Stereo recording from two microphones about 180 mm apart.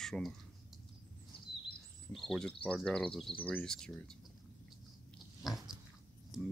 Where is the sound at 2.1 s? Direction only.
Centre (ahead or behind).